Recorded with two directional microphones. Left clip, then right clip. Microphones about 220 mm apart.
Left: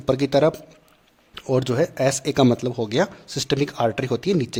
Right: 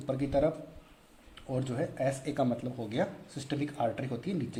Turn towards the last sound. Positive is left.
turn(degrees=40)  # may be behind; listen again after turning